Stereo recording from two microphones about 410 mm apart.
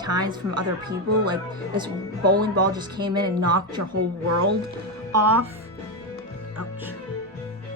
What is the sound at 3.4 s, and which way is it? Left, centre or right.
Speech, right.